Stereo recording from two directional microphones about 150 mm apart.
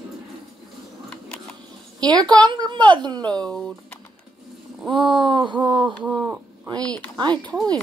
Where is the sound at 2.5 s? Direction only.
30° right (ahead or behind).